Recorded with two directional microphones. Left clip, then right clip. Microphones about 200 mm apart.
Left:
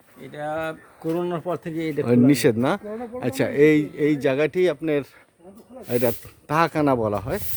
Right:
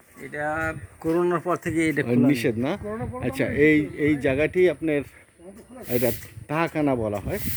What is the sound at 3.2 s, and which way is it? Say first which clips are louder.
Speech: left 3 dB; 15° left (ahead or behind).